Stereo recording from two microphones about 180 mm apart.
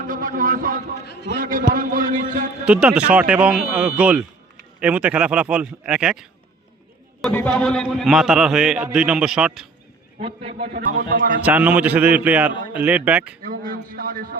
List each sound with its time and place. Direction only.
0.1 s a man's voice: 50° right (ahead or behind)
1.0 s a man's voice: 65° left (ahead or behind)
1.4 s a man's voice: 50° right (ahead or behind)
2.6 s speech: 5° right (ahead or behind)
7.2 s a man's voice: 5° left (ahead or behind)
10.2 s a man's voice: 30° right (ahead or behind)
10.6 s a man's voice: 55° right (ahead or behind)
11.4 s speech: 10° right (ahead or behind)
13.4 s a man's voice: 50° right (ahead or behind)